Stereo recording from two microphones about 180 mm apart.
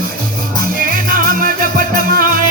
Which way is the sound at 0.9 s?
55° right (ahead or behind).